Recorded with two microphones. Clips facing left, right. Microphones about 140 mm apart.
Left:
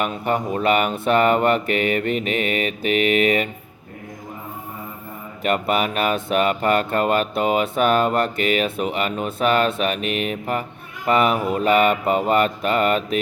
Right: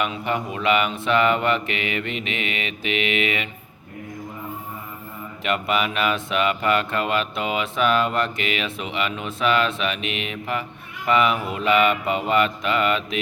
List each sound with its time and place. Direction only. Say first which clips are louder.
0.0 s speech: left 3 dB; 45° left (ahead or behind)
5.4 s speech: left 3 dB; 45° left (ahead or behind)